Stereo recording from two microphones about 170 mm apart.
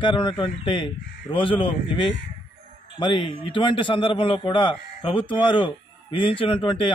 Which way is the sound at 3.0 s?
30° left (ahead or behind).